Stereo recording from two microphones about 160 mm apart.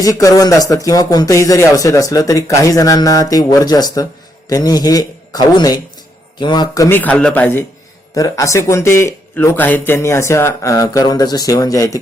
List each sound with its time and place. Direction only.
0.0 s a man's voice: 20° left (ahead or behind)